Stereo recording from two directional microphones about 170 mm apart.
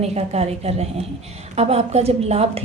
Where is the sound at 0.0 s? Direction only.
40° right (ahead or behind).